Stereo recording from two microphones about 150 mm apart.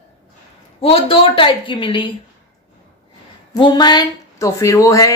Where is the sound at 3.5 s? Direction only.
30° left (ahead or behind).